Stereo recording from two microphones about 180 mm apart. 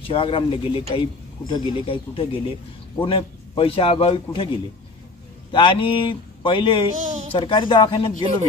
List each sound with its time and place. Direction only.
0.0 s a man's voice: 30° left (ahead or behind)
5.5 s speech: 30° left (ahead or behind)